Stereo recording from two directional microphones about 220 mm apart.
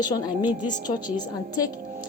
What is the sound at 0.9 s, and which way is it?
Speech, 20° left (ahead or behind).